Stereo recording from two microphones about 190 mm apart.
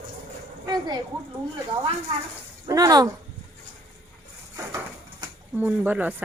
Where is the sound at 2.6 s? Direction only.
20° right (ahead or behind).